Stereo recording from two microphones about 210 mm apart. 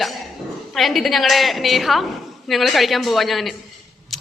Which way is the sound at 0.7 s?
Centre (ahead or behind).